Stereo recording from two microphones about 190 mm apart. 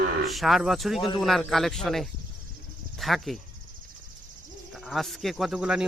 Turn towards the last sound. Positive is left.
turn(degrees=-5)  # may be behind; listen again after turning